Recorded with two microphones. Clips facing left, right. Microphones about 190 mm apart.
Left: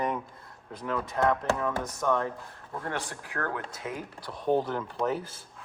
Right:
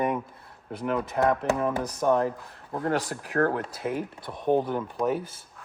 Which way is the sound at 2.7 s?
35° right (ahead or behind).